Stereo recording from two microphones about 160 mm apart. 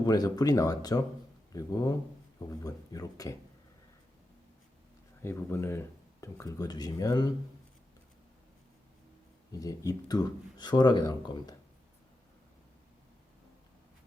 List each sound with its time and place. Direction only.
0.0 s speech: 25° left (ahead or behind)
5.2 s speech: 15° left (ahead or behind)
9.5 s speech: 20° left (ahead or behind)